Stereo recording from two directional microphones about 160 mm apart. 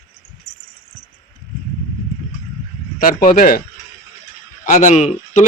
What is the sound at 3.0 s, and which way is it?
Speech, 60° left (ahead or behind).